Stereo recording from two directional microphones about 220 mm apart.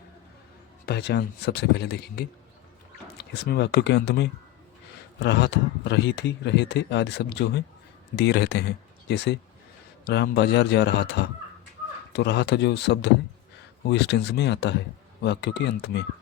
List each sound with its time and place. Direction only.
0.9 s speech: 50° left (ahead or behind)
3.4 s speech: 45° left (ahead or behind)